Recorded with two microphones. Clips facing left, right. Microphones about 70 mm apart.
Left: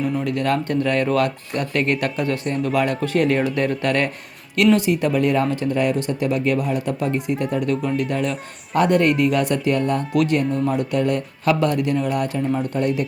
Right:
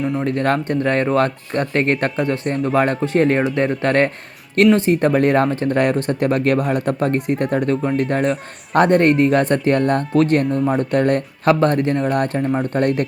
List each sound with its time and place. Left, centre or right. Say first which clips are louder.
0.2 s speech: right 3 dB; right
3.0 s speech: right 3 dB; right
7.7 s speech: right 3 dB; right
8.0 s speech: right 4 dB; right
10.2 s speech: right 3 dB; right